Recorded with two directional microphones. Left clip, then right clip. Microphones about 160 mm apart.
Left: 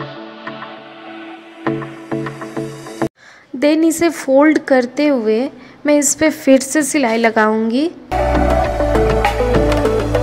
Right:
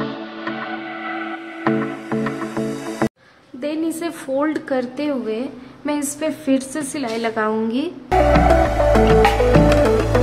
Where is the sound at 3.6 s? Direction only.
45° left (ahead or behind).